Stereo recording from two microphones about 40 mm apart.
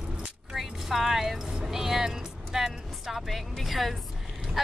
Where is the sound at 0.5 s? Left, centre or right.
Centre.